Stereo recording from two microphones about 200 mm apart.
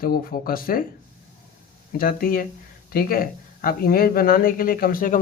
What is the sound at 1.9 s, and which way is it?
Speech, 45° left (ahead or behind).